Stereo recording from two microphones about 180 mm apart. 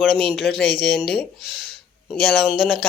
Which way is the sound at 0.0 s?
Centre (ahead or behind).